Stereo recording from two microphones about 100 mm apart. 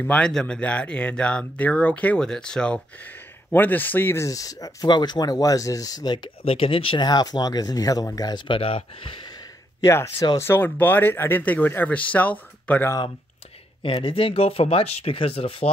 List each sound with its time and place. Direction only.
0.0 s speech: 10° left (ahead or behind); by 6.3 s 50° left (ahead or behind)
6.4 s speech: 70° left (ahead or behind)
7.0 s speech: 45° left (ahead or behind)
8.5 s speech: 65° left (ahead or behind)
9.8 s speech: 25° left (ahead or behind)
13.8 s speech: 60° left (ahead or behind); by 15.7 s 75° left (ahead or behind)